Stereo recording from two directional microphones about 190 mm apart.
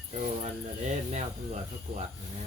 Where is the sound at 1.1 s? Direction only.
40° right (ahead or behind).